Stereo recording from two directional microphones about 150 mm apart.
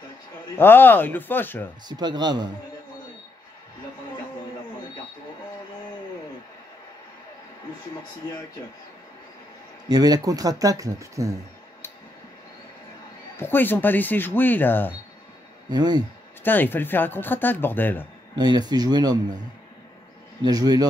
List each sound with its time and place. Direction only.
0.6 s speech: 15° left (ahead or behind)
1.9 s speech: 30° right (ahead or behind)
9.8 s speech: 25° right (ahead or behind)
13.4 s speech: 15° left (ahead or behind)
15.7 s speech: 25° right (ahead or behind)
16.4 s speech: 15° left (ahead or behind)
18.3 s speech: 30° right (ahead or behind)
20.4 s speech: 25° right (ahead or behind)